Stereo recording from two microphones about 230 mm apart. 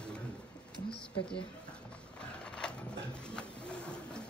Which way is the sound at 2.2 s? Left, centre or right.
Centre.